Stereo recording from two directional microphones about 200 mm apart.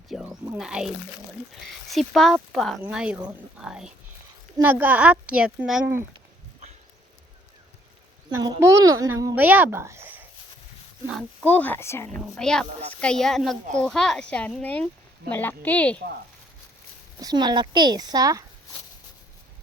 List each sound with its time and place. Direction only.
0.3 s a woman's voice: 10° right (ahead or behind)
8.3 s a woman's voice: 15° right (ahead or behind); by 16.0 s 5° left (ahead or behind)
17.2 s speech: 20° right (ahead or behind)